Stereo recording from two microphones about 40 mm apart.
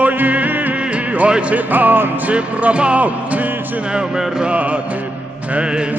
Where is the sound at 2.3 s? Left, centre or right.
Right.